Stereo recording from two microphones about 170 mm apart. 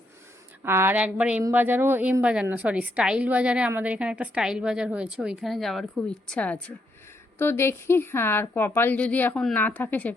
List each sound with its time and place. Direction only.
0.6 s a woman's voice: 15° right (ahead or behind); by 10.2 s 10° left (ahead or behind)